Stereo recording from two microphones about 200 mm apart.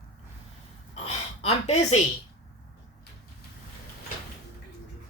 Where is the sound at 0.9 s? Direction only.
30° left (ahead or behind).